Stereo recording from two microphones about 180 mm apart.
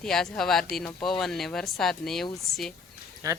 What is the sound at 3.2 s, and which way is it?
Speech, 20° right (ahead or behind).